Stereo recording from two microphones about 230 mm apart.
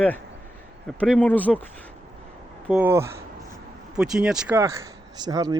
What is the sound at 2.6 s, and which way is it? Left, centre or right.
Speech, centre.